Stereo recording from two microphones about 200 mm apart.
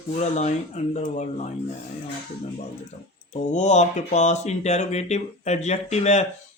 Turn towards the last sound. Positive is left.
turn(degrees=35)  # may be behind; listen again after turning